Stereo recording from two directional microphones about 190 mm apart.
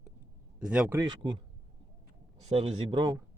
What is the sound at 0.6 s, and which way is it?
Speech, 5° right (ahead or behind).